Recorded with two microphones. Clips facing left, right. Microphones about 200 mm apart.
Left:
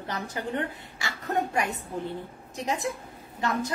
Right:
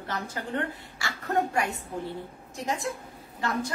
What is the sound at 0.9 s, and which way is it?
A woman's voice, 20° left (ahead or behind).